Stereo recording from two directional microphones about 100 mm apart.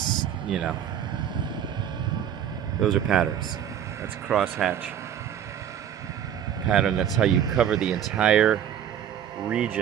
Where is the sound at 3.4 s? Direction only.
35° right (ahead or behind).